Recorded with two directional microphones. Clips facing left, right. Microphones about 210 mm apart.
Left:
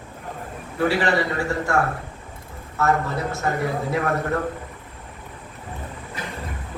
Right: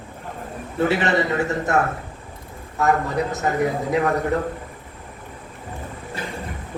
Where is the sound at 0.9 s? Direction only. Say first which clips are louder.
Right 1 dB; 20° right (ahead or behind).